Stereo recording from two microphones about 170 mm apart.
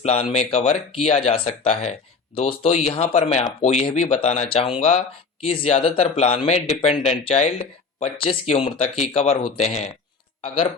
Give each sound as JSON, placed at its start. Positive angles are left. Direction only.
{"t": 0.0, "sound": "speech", "side_deg": 40}